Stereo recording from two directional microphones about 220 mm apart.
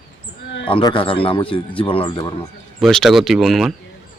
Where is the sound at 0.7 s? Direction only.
25° left (ahead or behind).